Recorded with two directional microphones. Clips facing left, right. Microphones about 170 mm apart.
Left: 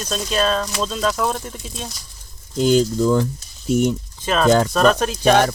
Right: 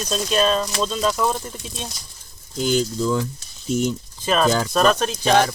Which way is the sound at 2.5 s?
50° left (ahead or behind).